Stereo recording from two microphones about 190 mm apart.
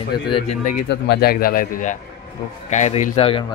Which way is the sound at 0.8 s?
60° left (ahead or behind).